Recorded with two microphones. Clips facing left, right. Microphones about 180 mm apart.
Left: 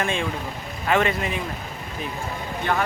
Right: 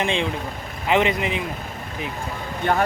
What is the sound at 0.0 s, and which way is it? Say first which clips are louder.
Speech: right 2 dB; 20° right (ahead or behind).